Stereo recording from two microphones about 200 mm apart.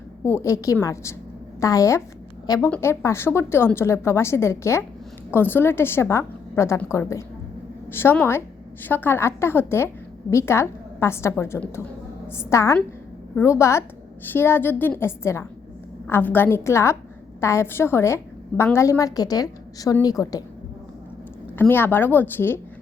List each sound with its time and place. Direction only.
0.3 s a woman's voice: 15° left (ahead or behind)
21.6 s a woman's voice: 10° left (ahead or behind)